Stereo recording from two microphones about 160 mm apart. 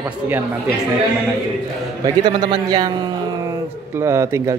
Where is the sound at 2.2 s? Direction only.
30° right (ahead or behind).